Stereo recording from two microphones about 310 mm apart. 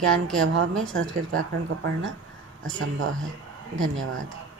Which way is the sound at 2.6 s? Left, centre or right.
Right.